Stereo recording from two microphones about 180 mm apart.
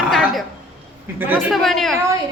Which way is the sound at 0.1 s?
Centre (ahead or behind).